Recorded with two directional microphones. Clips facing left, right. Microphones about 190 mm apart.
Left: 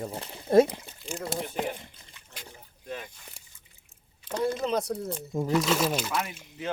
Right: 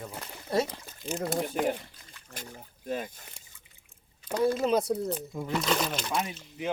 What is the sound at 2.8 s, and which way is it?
Speech, 45° right (ahead or behind).